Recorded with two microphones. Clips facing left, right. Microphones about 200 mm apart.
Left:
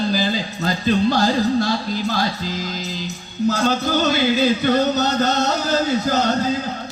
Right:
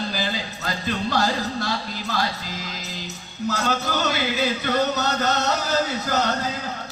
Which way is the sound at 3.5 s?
30° left (ahead or behind).